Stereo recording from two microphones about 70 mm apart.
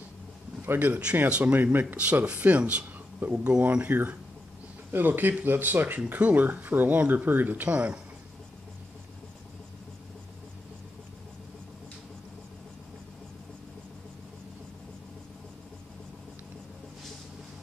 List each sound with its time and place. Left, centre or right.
0.7 s speech: right